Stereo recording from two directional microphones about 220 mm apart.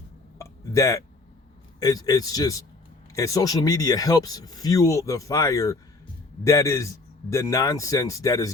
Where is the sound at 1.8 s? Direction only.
15° left (ahead or behind).